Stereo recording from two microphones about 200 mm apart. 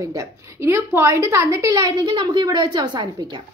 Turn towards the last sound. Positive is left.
turn(degrees=-20)  # may be behind; listen again after turning